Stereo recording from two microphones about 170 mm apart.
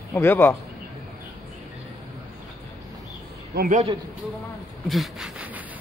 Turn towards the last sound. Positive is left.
turn(degrees=-10)  # may be behind; listen again after turning